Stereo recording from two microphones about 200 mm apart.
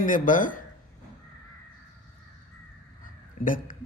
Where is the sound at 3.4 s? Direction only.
45° left (ahead or behind).